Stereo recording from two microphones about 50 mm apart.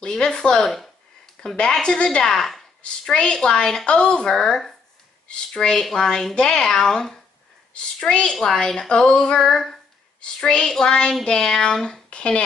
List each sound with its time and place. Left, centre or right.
0.0 s speech: centre
0.7 s a sound: centre
1.4 s speech: centre
3.1 s a woman's voice: centre
8.3 s speech: centre
10.2 s a woman's voice: centre